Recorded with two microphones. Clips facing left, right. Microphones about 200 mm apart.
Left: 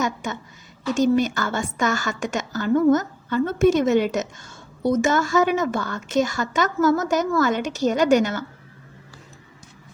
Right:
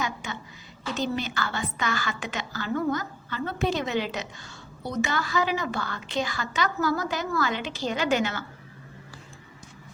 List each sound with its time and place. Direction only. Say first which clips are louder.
0.9 s a woman's voice: left 10 dB; 45° left (ahead or behind)